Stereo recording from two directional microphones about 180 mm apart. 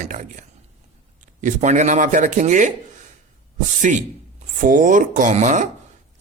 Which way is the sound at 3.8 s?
45° right (ahead or behind).